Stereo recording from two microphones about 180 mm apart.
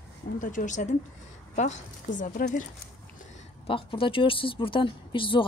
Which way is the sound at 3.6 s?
30° left (ahead or behind).